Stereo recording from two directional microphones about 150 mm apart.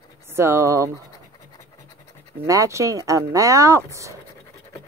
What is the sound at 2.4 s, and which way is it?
Speech, 20° right (ahead or behind).